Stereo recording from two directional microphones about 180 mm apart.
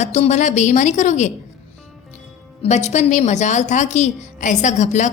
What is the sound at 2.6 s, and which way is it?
A woman's voice, 40° left (ahead or behind).